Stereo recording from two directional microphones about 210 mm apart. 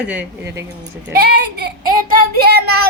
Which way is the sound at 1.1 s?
50° right (ahead or behind).